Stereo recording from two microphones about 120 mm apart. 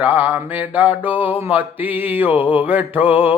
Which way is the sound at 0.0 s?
15° right (ahead or behind).